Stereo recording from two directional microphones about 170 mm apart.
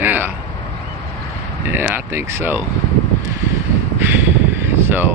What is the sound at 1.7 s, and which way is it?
Speech, 10° right (ahead or behind).